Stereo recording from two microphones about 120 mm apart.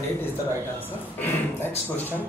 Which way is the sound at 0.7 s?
15° left (ahead or behind).